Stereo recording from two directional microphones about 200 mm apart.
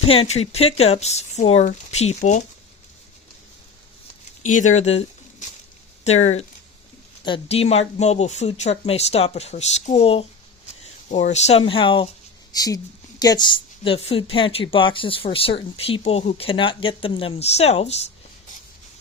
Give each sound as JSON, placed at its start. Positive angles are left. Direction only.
{"t": 0.0, "sound": "speech", "side_deg": 30}
{"t": 4.4, "sound": "a woman's voice", "side_deg": 40}